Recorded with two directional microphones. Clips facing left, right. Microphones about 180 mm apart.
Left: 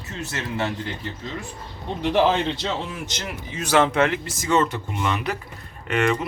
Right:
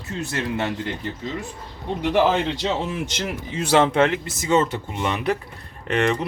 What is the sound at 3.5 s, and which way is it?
Speech, 25° right (ahead or behind).